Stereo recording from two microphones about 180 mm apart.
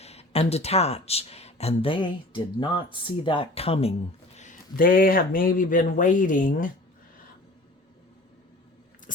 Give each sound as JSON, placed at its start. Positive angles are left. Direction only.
{"t": 0.0, "sound": "speech", "side_deg": 35}
{"t": 4.4, "sound": "speech", "side_deg": 45}
{"t": 9.1, "sound": "a sound", "side_deg": 45}